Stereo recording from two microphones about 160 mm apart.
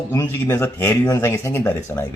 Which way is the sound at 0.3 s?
15° left (ahead or behind).